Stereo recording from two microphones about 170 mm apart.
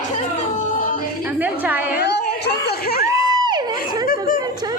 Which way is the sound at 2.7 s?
65° left (ahead or behind).